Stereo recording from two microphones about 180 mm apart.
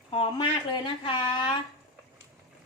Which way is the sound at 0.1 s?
25° left (ahead or behind).